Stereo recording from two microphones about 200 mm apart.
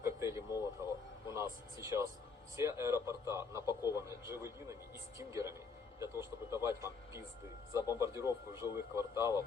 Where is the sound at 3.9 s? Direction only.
15° right (ahead or behind).